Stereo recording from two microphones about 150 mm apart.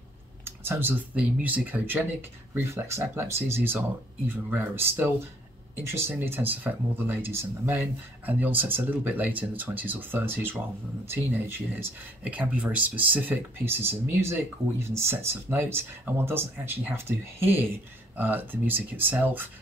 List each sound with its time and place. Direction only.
0.5 s speech: 15° right (ahead or behind)